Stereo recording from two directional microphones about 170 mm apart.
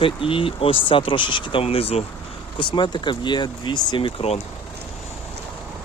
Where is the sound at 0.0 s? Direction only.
30° left (ahead or behind).